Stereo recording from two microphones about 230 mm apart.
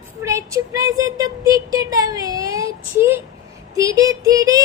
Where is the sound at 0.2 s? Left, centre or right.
Centre.